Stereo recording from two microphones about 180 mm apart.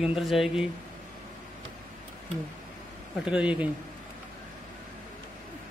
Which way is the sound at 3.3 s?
5° right (ahead or behind).